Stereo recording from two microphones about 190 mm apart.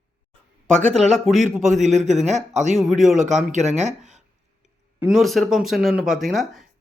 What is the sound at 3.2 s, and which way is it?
Speech, 40° right (ahead or behind).